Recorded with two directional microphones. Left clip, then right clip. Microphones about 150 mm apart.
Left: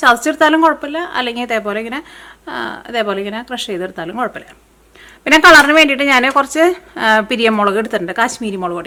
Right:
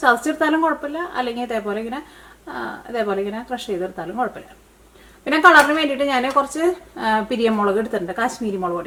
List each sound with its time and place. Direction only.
0.3 s a woman's voice: 40° left (ahead or behind)